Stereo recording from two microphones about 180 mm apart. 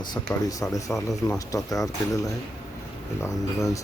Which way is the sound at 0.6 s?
10° left (ahead or behind).